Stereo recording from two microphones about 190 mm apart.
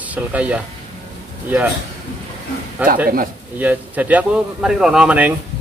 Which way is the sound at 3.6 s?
10° right (ahead or behind).